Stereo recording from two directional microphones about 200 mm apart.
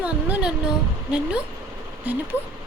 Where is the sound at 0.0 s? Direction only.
5° right (ahead or behind).